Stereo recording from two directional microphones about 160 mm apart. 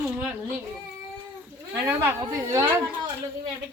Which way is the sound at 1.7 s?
15° right (ahead or behind).